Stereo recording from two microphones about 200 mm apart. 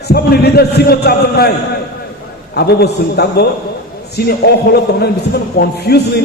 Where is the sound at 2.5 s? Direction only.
55° left (ahead or behind).